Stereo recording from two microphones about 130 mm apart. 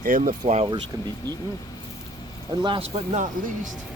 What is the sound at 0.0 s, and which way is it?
Speech, 90° right.